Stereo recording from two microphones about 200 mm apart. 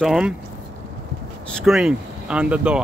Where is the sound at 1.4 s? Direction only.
5° left (ahead or behind).